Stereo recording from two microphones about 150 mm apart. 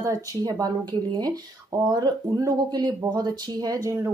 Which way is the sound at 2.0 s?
25° right (ahead or behind).